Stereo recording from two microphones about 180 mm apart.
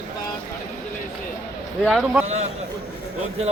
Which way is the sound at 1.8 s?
Centre (ahead or behind).